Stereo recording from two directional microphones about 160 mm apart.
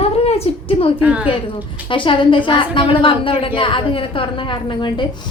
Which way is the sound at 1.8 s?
30° left (ahead or behind).